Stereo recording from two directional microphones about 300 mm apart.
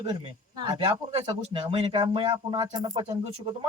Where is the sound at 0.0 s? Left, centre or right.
Centre.